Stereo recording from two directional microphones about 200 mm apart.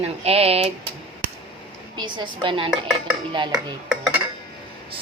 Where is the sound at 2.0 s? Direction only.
25° right (ahead or behind).